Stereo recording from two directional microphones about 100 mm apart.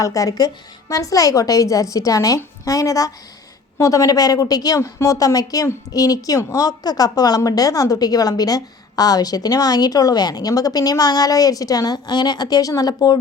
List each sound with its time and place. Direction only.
0.0 s a woman's voice: 35° left (ahead or behind)